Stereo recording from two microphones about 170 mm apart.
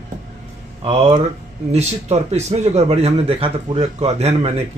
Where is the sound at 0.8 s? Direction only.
35° right (ahead or behind).